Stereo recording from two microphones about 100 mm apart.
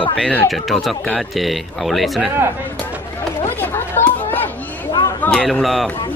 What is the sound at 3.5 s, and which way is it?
Chatter, 20° left (ahead or behind).